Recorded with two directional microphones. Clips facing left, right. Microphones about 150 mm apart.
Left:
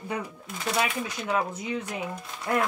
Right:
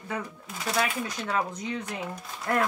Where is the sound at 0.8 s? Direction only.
5° left (ahead or behind).